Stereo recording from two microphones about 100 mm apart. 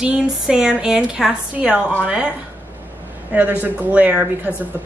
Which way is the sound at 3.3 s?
15° right (ahead or behind).